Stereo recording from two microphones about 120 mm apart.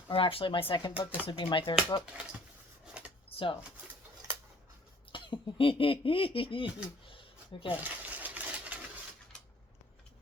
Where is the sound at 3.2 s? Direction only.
50° left (ahead or behind).